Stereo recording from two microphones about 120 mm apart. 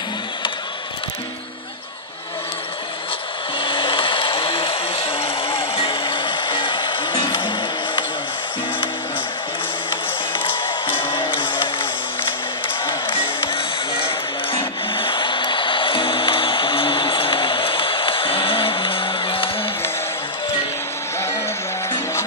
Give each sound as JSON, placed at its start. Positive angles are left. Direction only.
{"t": 3.5, "sound": "a sound", "side_deg": 45}
{"t": 10.3, "sound": "music", "side_deg": 45}
{"t": 12.8, "sound": "music", "side_deg": 45}